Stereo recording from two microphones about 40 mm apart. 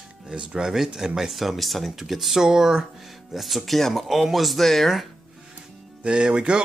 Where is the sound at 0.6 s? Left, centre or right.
Centre.